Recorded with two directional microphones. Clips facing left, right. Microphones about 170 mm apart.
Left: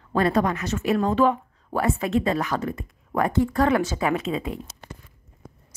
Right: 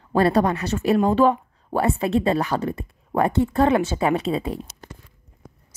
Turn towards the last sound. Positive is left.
turn(degrees=-35)  # may be behind; listen again after turning